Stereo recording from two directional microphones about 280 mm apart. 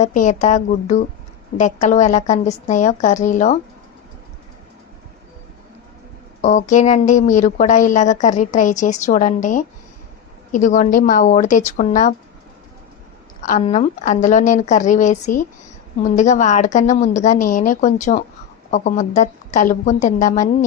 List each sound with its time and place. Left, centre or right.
0.0 s speech: left
6.4 s speech: left
13.4 s speech: left